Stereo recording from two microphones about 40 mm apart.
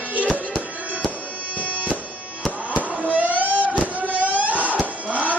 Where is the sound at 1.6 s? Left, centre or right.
Right.